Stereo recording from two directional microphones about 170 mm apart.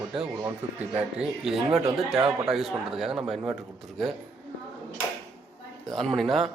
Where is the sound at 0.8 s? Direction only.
5° right (ahead or behind).